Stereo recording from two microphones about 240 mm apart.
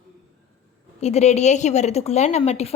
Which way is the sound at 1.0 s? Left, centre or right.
Left.